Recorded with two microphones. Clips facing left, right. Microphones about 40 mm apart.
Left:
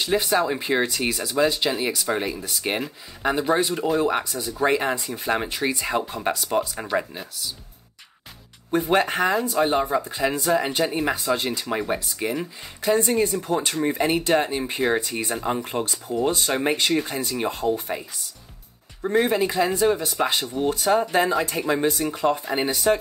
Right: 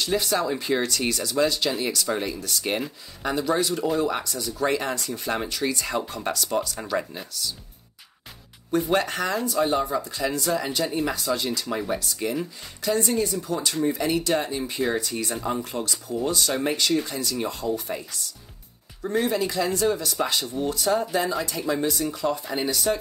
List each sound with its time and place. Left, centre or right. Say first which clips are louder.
0.0 s speech: left 3 dB; left
7.2 s speech: even; centre
8.7 s speech: left 3 dB; left
19.0 s speech: left 3 dB; left